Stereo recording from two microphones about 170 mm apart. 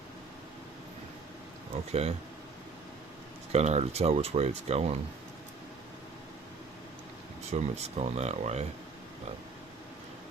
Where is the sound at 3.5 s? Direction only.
40° right (ahead or behind).